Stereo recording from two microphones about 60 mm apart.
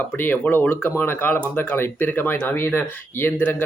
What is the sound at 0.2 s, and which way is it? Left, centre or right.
Speech, left.